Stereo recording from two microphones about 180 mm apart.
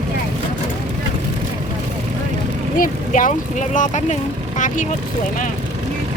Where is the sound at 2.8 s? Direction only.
45° left (ahead or behind).